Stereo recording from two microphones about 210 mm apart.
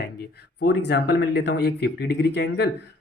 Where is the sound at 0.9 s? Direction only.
50° left (ahead or behind).